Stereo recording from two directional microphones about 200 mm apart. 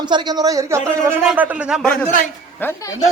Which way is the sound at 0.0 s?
20° right (ahead or behind).